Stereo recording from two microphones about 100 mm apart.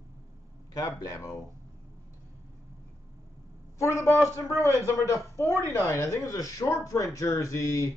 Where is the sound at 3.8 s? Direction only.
30° left (ahead or behind).